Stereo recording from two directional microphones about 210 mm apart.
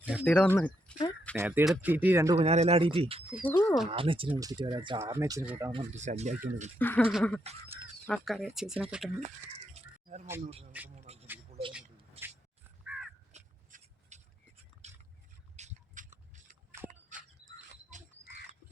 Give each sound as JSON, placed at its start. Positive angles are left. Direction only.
{"t": 0.0, "sound": "speech", "side_deg": -5}
{"t": 0.3, "sound": "speech", "side_deg": 10}
{"t": 1.4, "sound": "speech", "side_deg": -10}
{"t": 2.4, "sound": "speech", "side_deg": -30}
{"t": 3.4, "sound": "speech", "side_deg": 10}
{"t": 3.8, "sound": "speech", "side_deg": -25}
{"t": 5.7, "sound": "speech", "side_deg": -35}
{"t": 6.7, "sound": "speech", "side_deg": 10}
{"t": 9.7, "sound": "a sound", "side_deg": -35}
{"t": 10.4, "sound": "speech", "side_deg": -30}
{"t": 10.7, "sound": "speech", "side_deg": -5}
{"t": 11.0, "sound": "a sound", "side_deg": -30}
{"t": 13.3, "sound": "scrape", "side_deg": -35}
{"t": 15.5, "sound": "a sound", "side_deg": -35}